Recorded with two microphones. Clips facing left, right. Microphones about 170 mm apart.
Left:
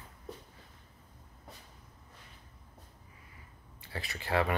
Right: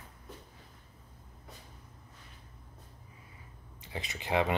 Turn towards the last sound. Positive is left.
turn(degrees=-20)  # may be behind; listen again after turning